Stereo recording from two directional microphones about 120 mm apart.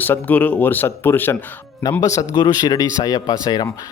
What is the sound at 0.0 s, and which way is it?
Speech, 15° left (ahead or behind).